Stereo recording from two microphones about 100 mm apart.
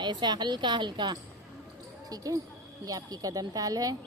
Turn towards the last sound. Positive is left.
turn(degrees=-35)  # may be behind; listen again after turning